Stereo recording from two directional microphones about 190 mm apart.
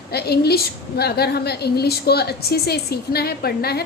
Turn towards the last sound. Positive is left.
turn(degrees=55)  # may be behind; listen again after turning